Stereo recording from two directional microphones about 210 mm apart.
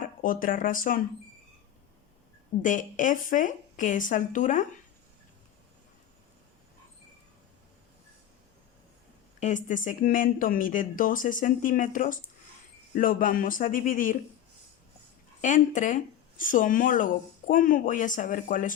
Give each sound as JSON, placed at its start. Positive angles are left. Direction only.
{"t": 0.0, "sound": "speech", "side_deg": 40}
{"t": 2.6, "sound": "speech", "side_deg": 40}
{"t": 9.4, "sound": "speech", "side_deg": 40}
{"t": 15.4, "sound": "speech", "side_deg": 35}